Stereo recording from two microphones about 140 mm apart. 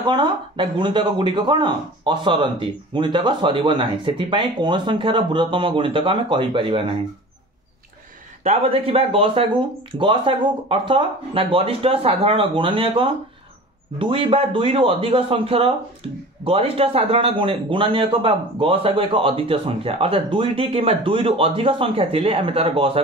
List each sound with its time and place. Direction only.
0.0 s speech: 35° right (ahead or behind)
8.5 s speech: 45° right (ahead or behind)